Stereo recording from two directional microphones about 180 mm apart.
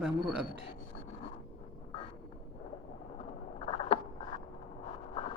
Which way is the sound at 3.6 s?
30° left (ahead or behind).